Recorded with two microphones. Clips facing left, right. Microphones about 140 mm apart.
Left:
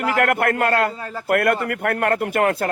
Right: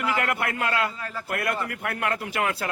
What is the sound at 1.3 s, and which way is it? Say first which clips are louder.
A man's voice: left 10 dB; 55° left (ahead or behind).